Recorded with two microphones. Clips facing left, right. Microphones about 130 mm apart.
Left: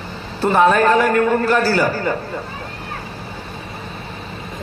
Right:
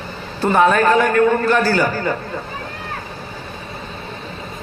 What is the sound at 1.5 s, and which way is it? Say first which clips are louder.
Speech: even; 30° left (ahead or behind).